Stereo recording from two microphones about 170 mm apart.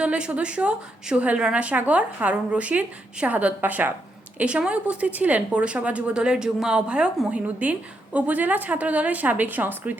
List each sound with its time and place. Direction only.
0.0 s a woman's voice: 5° right (ahead or behind)